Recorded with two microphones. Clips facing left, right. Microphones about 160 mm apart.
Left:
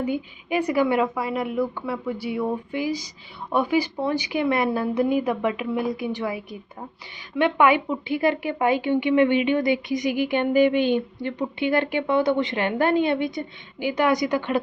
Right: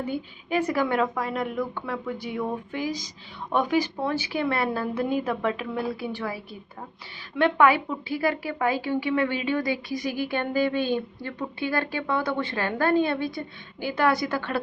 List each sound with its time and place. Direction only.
0.0 s a woman's voice: 10° left (ahead or behind)